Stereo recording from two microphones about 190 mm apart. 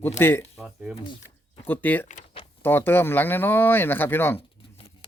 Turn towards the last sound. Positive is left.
turn(degrees=30)  # may be behind; listen again after turning